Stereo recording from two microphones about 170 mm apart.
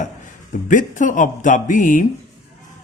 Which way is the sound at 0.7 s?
50° left (ahead or behind).